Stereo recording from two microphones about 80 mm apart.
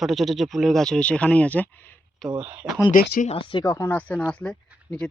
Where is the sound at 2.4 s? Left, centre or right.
Centre.